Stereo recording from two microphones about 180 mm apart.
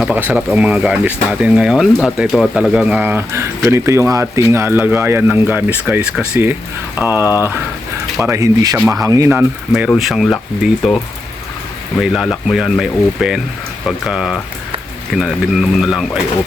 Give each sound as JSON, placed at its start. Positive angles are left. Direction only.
{"t": 0.0, "sound": "speech", "side_deg": -10}
{"t": 12.0, "sound": "speech", "side_deg": 0}